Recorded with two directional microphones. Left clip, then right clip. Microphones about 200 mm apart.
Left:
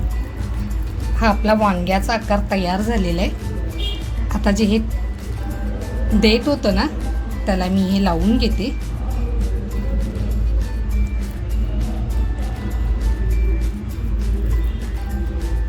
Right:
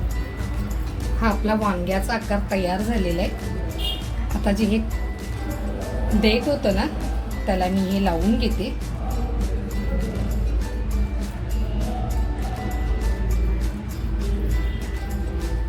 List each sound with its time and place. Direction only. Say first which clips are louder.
1.2 s a woman's voice: left 6 dB; 45° left (ahead or behind)
4.4 s speech: left 4 dB; 40° left (ahead or behind)
6.2 s speech: left 4 dB; 35° left (ahead or behind)